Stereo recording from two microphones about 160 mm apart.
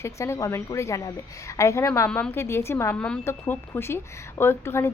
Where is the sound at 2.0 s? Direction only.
5° left (ahead or behind).